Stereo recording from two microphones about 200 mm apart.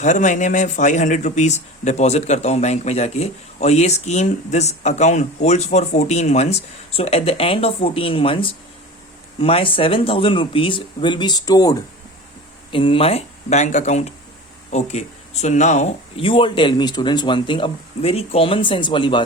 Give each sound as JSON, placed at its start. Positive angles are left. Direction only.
{"t": 0.0, "sound": "speech", "side_deg": 40}